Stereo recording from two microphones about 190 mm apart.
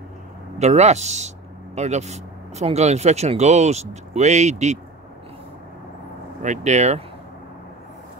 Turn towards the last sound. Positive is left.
turn(degrees=-35)  # may be behind; listen again after turning